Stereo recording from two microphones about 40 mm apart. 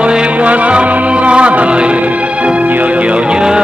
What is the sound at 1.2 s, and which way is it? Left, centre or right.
Music, right.